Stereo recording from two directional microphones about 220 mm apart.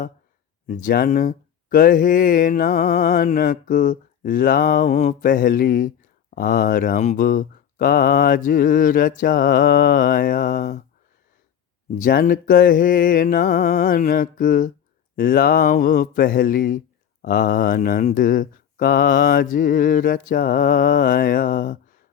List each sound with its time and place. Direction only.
0.7 s mantra: 40° left (ahead or behind)
11.9 s mantra: 40° left (ahead or behind)